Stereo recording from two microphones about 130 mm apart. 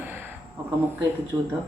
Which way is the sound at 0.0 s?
15° right (ahead or behind).